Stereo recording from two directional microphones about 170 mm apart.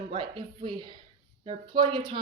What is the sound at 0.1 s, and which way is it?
A woman's voice, 30° right (ahead or behind).